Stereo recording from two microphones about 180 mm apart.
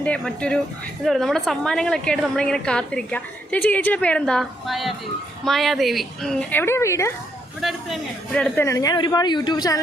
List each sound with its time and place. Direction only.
0.0 s a woman's voice: 5° left (ahead or behind)
7.6 s a man's voice: centre (ahead or behind); by 9.8 s 20° left (ahead or behind)